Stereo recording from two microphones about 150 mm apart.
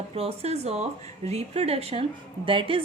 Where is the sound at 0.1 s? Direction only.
40° right (ahead or behind).